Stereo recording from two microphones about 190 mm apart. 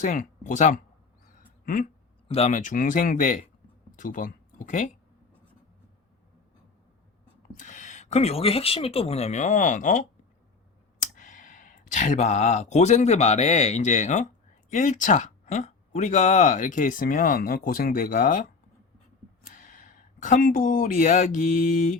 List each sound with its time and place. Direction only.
0.0 s speech: 40° left (ahead or behind)
1.6 s a sound: 45° left (ahead or behind)
2.2 s speech: 30° left (ahead or behind)
7.5 s speech: 40° left (ahead or behind)